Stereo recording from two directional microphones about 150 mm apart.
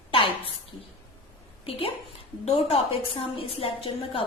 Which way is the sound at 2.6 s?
40° left (ahead or behind).